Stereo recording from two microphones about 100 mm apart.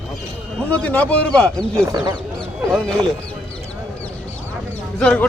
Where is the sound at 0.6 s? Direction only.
15° left (ahead or behind).